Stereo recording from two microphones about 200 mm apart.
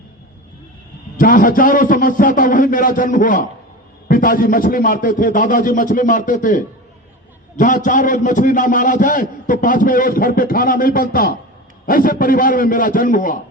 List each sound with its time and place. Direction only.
1.1 s a man's voice: 45° left (ahead or behind)